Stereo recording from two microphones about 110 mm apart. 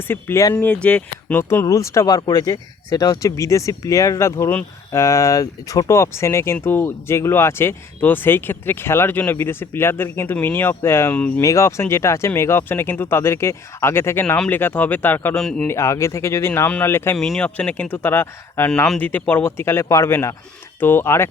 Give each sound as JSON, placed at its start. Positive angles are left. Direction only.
{"t": 0.1, "sound": "speech", "side_deg": 20}
{"t": 1.4, "sound": "speech", "side_deg": 25}
{"t": 14.3, "sound": "speech", "side_deg": 10}
{"t": 15.4, "sound": "a man's voice", "side_deg": 5}
{"t": 15.6, "sound": "speech", "side_deg": 25}
{"t": 17.2, "sound": "speech", "side_deg": 5}